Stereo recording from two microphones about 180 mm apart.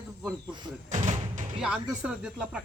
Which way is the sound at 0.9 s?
40° right (ahead or behind).